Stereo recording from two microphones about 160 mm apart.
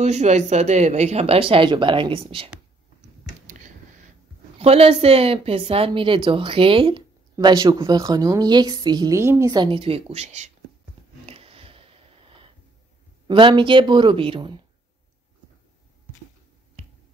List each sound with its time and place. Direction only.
0.0 s a woman's voice: 45° right (ahead or behind)
4.6 s a woman's voice: 40° right (ahead or behind)
11.2 s wheeze: 35° right (ahead or behind)
13.3 s a woman's voice: 30° right (ahead or behind)